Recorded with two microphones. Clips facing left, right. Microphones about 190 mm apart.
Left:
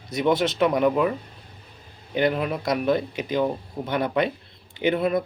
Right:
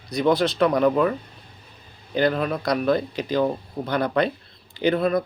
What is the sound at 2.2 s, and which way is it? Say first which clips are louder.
Speech: right 1 dB; 15° left (ahead or behind).